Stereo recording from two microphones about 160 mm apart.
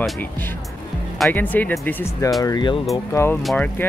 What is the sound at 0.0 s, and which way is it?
Speech, 10° left (ahead or behind).